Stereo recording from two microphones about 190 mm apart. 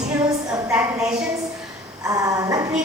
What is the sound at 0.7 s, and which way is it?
Speech, 5° right (ahead or behind).